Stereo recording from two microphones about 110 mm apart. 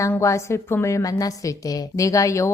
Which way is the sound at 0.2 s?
25° left (ahead or behind).